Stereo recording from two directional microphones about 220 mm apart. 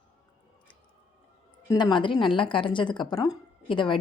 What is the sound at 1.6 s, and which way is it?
A woman's voice, 20° left (ahead or behind).